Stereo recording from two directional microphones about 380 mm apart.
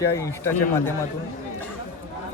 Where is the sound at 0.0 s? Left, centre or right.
Centre.